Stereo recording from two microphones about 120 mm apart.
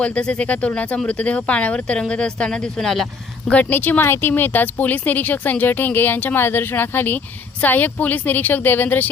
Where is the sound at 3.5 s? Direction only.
15° left (ahead or behind).